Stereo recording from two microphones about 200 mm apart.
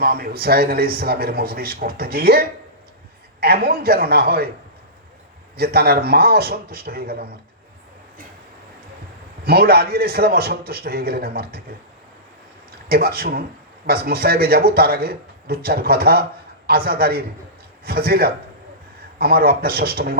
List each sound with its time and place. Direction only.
0.0 s a man's voice: 50° right (ahead or behind)
5.5 s a man's voice: 50° right (ahead or behind)
9.4 s a man's voice: 50° right (ahead or behind)
12.9 s a man's voice: 50° right (ahead or behind)